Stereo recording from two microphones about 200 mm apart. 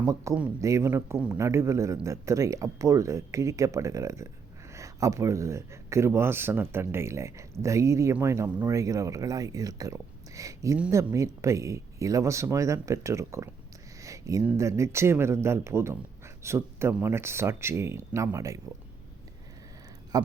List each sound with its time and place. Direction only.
0.0 s speech: 15° right (ahead or behind)
20.1 s a man's voice: 20° right (ahead or behind)